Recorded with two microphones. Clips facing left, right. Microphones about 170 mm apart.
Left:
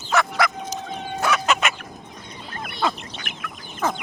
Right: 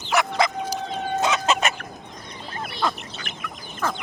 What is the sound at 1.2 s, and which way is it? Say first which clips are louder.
Chicken: left 1 dB; 20° right (ahead or behind).